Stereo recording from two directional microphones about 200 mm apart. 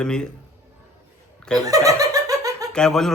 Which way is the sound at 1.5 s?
15° right (ahead or behind).